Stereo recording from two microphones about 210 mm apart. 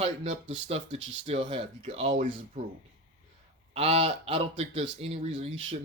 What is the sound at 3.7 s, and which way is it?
Speech, 30° right (ahead or behind).